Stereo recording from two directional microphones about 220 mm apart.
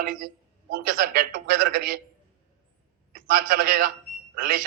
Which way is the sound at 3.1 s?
40° right (ahead or behind).